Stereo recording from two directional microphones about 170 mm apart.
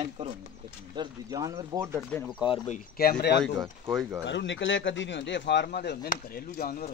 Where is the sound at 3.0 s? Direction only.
65° left (ahead or behind).